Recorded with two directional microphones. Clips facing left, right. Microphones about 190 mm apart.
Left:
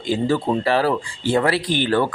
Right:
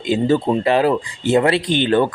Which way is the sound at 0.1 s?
20° right (ahead or behind).